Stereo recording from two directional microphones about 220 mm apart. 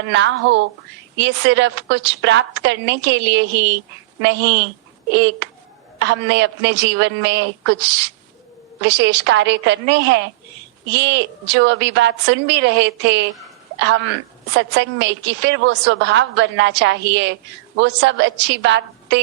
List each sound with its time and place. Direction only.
0.1 s a woman's voice: 55° right (ahead or behind)